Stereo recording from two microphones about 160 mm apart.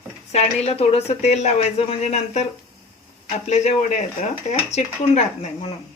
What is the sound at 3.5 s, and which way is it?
Speech, 45° left (ahead or behind).